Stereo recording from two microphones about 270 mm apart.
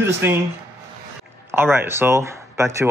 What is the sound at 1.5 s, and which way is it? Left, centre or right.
Speech, centre.